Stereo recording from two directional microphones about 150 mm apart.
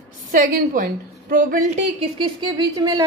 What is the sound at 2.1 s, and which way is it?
Speech, 35° right (ahead or behind).